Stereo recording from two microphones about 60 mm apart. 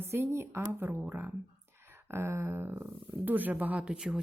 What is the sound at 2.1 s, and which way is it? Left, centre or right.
A woman's voice, right.